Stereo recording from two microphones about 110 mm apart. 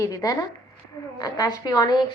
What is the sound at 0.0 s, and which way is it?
A woman's voice, 35° left (ahead or behind).